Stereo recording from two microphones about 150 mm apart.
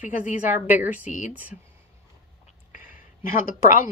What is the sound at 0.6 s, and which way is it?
Speech, 10° right (ahead or behind).